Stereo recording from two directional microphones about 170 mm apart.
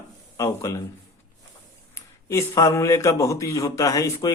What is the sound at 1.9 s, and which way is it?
Speech, 20° left (ahead or behind).